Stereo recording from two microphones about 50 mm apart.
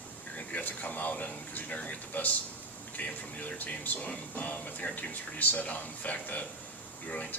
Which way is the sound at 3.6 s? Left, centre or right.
Left.